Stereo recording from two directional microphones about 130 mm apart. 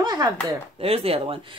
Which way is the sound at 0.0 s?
30° right (ahead or behind).